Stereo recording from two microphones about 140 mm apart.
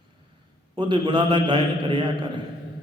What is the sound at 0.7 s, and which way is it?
A man's voice, 35° right (ahead or behind).